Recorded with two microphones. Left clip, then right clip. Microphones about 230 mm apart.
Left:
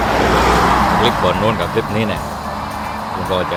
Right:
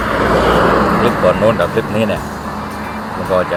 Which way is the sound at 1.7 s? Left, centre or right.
Left.